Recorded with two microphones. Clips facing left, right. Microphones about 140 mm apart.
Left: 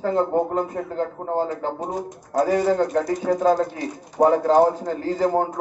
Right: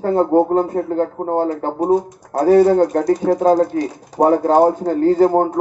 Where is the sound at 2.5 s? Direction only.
35° right (ahead or behind).